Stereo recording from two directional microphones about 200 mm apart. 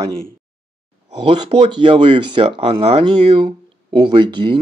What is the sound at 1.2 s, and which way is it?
Speech, 25° right (ahead or behind).